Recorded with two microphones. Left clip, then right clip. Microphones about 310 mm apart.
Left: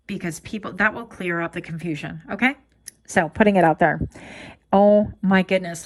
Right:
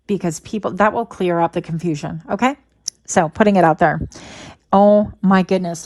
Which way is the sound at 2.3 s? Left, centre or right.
Centre.